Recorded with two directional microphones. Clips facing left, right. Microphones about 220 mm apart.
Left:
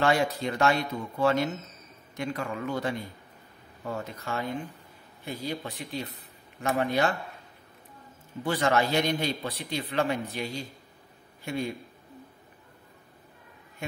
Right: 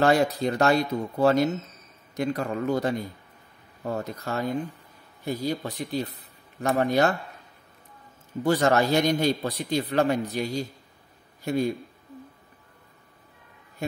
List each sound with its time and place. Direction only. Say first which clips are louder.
0.0 s speech: right 4 dB; 40° right (ahead or behind)
8.5 s speech: right 4 dB; 40° right (ahead or behind)